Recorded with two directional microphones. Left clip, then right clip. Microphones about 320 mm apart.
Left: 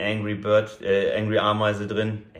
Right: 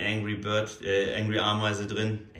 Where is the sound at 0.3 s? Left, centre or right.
Centre.